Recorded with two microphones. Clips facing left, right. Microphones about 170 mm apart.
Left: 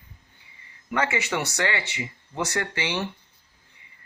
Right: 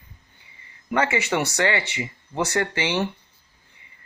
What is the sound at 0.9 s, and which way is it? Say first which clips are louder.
Speech: right 3 dB; 30° right (ahead or behind).